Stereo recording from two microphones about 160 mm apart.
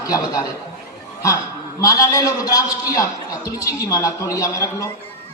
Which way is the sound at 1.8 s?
20° left (ahead or behind).